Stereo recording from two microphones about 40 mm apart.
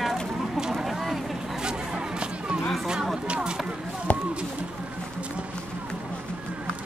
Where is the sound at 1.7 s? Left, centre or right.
Right.